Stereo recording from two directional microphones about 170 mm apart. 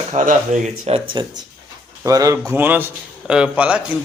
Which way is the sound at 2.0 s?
20° right (ahead or behind).